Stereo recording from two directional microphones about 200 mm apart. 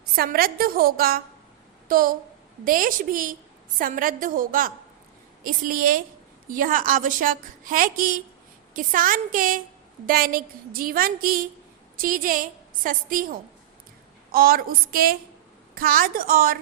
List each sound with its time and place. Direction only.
0.2 s a woman's voice: 45° right (ahead or behind)